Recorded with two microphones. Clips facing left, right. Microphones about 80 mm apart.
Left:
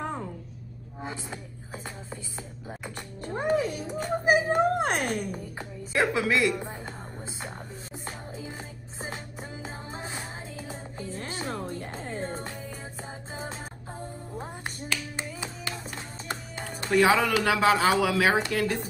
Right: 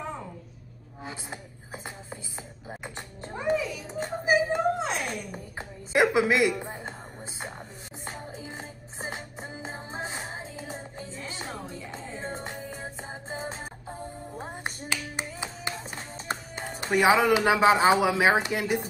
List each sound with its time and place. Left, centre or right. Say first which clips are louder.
1.1 s a sound: left 2 dB; centre
3.3 s music: left 1 dB; left
4.2 s a sound: left 1 dB; left
5.6 s a sound: right 4 dB; centre
6.6 s music: even; centre
8.0 s music: right 1 dB; right
11.1 s music: left 4 dB; left
12.3 s music: even; right
14.3 s music: right 1 dB; centre
16.3 s a man's voice: right 2 dB; right